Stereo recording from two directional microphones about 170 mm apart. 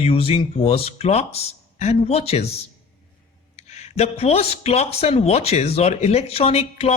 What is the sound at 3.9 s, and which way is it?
Speech, 35° left (ahead or behind).